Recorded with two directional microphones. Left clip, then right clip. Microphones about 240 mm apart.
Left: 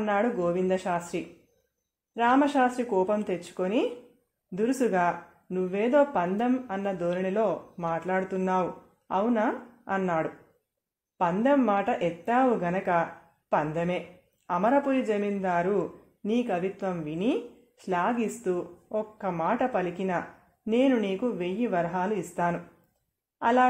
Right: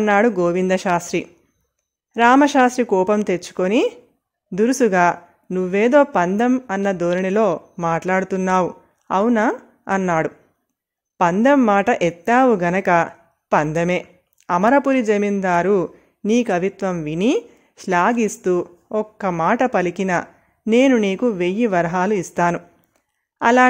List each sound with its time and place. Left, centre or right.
0.0 s a woman's voice: right